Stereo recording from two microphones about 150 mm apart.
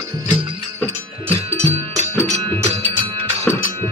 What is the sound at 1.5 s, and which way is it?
Music, 45° right (ahead or behind).